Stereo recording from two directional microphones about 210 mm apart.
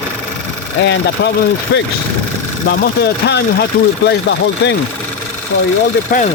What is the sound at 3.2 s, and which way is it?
Speech, 55° left (ahead or behind).